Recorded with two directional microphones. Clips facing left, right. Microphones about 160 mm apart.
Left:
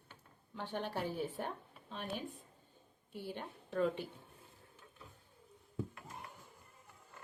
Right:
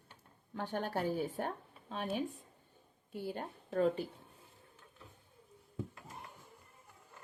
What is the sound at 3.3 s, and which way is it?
Speech, 45° right (ahead or behind).